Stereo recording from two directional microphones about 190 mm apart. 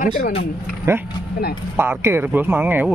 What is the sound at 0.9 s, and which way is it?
Speech, 15° right (ahead or behind).